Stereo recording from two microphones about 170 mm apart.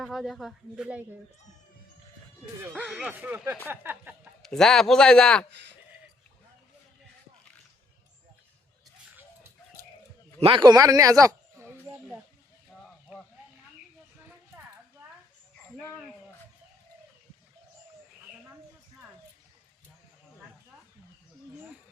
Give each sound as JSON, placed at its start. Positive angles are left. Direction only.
{"t": 0.0, "sound": "speech", "side_deg": 0}
{"t": 2.8, "sound": "speech", "side_deg": 0}
{"t": 3.2, "sound": "speech", "side_deg": -10}
{"t": 3.7, "sound": "a sound", "side_deg": -10}
{"t": 4.4, "sound": "speech", "side_deg": 5}
{"t": 10.4, "sound": "a man's voice", "side_deg": -30}
{"t": 14.3, "sound": "a sound", "side_deg": -15}